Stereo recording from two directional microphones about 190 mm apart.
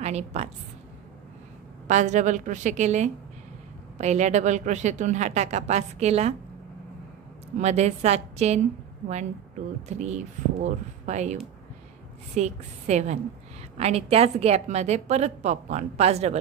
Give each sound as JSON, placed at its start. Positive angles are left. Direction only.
{"t": 0.0, "sound": "a woman's voice", "side_deg": -35}
{"t": 1.9, "sound": "a woman's voice", "side_deg": -40}
{"t": 7.5, "sound": "a woman's voice", "side_deg": -35}
{"t": 9.9, "sound": "a woman's voice", "side_deg": -40}
{"t": 12.4, "sound": "a woman's voice", "side_deg": -35}